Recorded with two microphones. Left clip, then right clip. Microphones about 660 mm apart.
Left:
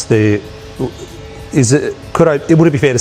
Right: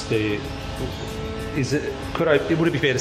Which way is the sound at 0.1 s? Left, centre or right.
Left.